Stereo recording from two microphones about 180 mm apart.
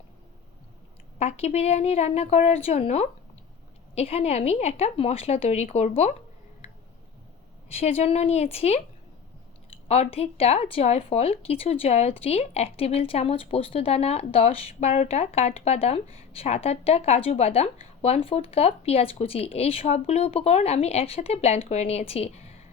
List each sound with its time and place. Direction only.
1.2 s speech: 35° left (ahead or behind)
7.7 s speech: 35° left (ahead or behind)
9.9 s speech: 35° left (ahead or behind)